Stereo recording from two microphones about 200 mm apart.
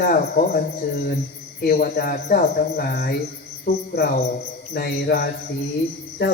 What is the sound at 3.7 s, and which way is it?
Cricket, 35° left (ahead or behind).